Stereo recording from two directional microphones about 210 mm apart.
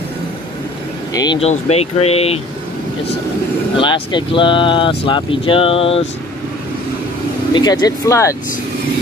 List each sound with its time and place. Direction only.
1.1 s speech: 20° left (ahead or behind)
3.7 s speech: 20° left (ahead or behind)
7.5 s speech: 20° left (ahead or behind)